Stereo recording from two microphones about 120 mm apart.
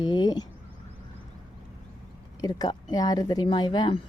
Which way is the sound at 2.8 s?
35° left (ahead or behind).